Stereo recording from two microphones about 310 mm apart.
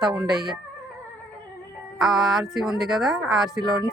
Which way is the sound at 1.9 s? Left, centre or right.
Centre.